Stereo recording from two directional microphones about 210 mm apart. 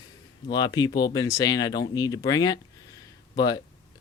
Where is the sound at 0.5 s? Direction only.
20° left (ahead or behind).